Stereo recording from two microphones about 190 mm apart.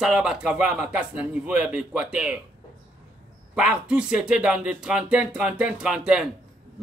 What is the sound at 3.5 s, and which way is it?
A man's voice, 5° right (ahead or behind).